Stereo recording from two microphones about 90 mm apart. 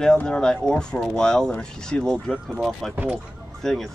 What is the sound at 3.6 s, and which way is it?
Speech, 5° left (ahead or behind).